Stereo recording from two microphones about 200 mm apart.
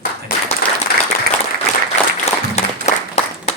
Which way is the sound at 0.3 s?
45° left (ahead or behind).